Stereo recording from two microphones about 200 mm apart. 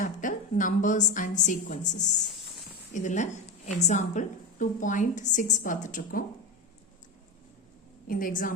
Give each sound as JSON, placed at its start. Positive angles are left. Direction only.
{"t": 0.0, "sound": "a woman's voice", "side_deg": 40}
{"t": 2.9, "sound": "a woman's voice", "side_deg": 40}
{"t": 8.0, "sound": "a woman's voice", "side_deg": 45}